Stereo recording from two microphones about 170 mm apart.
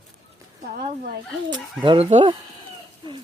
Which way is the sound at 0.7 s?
65° right (ahead or behind).